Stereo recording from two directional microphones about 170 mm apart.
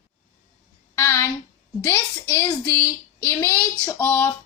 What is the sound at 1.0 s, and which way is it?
A woman's voice, 15° left (ahead or behind).